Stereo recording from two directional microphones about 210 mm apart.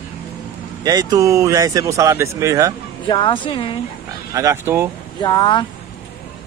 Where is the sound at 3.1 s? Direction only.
20° left (ahead or behind).